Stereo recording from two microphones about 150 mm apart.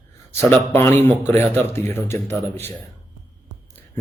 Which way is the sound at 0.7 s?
15° left (ahead or behind).